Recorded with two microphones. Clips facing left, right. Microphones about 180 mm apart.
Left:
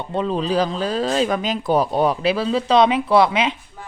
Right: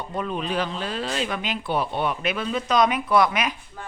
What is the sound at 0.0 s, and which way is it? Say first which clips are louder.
Speech: left 6 dB; 25° left (ahead or behind).